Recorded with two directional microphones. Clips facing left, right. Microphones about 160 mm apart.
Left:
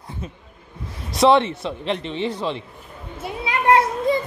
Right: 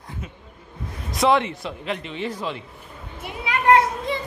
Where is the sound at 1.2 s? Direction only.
30° left (ahead or behind).